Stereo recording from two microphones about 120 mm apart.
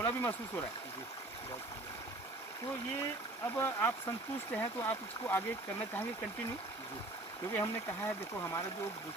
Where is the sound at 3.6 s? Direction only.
20° left (ahead or behind).